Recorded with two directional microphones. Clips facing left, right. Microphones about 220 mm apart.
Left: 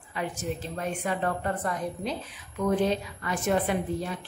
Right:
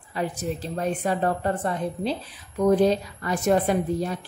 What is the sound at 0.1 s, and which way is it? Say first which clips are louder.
A woman's voice: right 4 dB; 35° right (ahead or behind).